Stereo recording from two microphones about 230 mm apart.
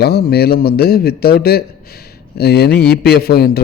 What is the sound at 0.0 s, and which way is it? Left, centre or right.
A man's voice, left.